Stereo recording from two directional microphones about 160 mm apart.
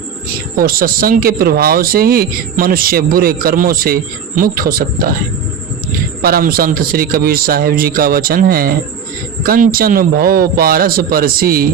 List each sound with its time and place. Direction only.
0.5 s speech: 65° right (ahead or behind)
6.2 s speech: 65° right (ahead or behind)